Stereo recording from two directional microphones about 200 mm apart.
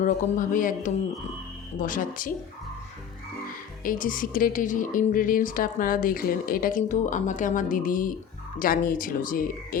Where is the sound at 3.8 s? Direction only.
45° left (ahead or behind).